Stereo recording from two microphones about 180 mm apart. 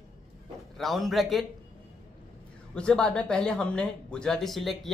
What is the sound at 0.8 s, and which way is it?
Speech, centre (ahead or behind).